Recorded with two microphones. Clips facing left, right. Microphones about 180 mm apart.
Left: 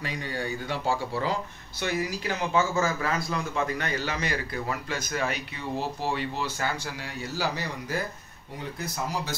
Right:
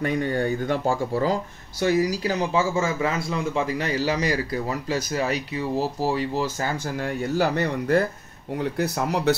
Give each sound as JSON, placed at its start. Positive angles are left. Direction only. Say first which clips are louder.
{"t": 0.0, "sound": "speech", "louder": "right 9 dB", "side_deg": -50}
{"t": 7.2, "sound": "a man's voice", "louder": "right 7 dB", "side_deg": -55}